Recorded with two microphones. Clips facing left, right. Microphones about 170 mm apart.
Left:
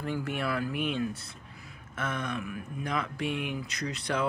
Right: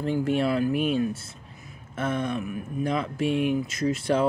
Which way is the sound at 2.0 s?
25° right (ahead or behind).